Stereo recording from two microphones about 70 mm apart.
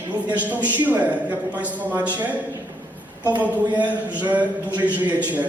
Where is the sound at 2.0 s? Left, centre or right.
Right.